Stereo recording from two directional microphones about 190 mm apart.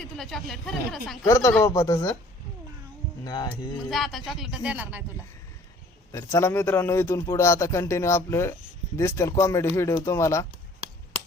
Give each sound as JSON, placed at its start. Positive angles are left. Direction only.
{"t": 0.2, "sound": "speech", "side_deg": 0}
{"t": 1.2, "sound": "a man's voice", "side_deg": 15}
{"t": 3.2, "sound": "speech", "side_deg": 20}
{"t": 3.8, "sound": "speech", "side_deg": 0}
{"t": 6.1, "sound": "a man's voice", "side_deg": 15}